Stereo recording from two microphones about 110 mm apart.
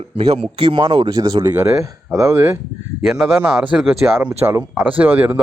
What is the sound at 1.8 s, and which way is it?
Speech, 25° right (ahead or behind).